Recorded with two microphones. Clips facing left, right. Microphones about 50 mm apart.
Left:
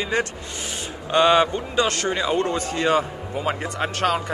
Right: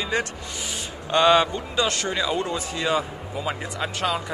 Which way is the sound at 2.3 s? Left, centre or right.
Left.